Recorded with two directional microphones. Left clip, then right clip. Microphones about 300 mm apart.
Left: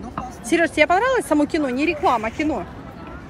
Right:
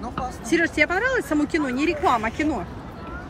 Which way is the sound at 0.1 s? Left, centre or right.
Centre.